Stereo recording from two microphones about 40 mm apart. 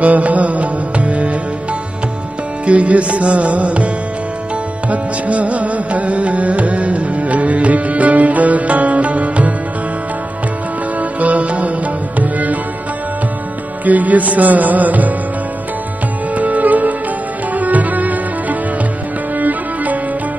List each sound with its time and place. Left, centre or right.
0.0 s music: right
2.6 s music: right
11.0 s music: right
13.8 s music: right
16.3 s music: right